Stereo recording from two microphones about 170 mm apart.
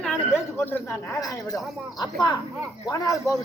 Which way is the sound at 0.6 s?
15° left (ahead or behind).